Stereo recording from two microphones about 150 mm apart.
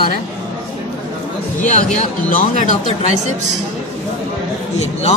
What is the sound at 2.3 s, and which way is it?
Speech, 60° left (ahead or behind).